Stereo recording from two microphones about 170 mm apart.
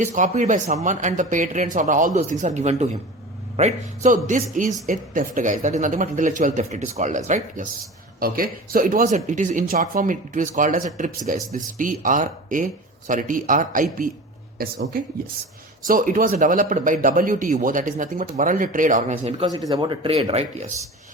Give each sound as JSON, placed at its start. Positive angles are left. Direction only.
{"t": 0.0, "sound": "a man's voice", "side_deg": -45}
{"t": 8.2, "sound": "a man's voice", "side_deg": -60}
{"t": 19.5, "sound": "speech", "side_deg": -20}